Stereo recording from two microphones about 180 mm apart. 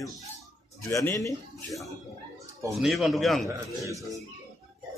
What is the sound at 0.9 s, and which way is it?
Speech, 20° left (ahead or behind).